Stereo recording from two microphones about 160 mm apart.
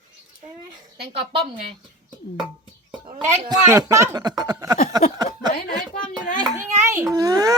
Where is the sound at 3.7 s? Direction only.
20° right (ahead or behind).